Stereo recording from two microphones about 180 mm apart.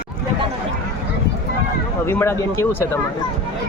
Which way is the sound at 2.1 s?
15° left (ahead or behind).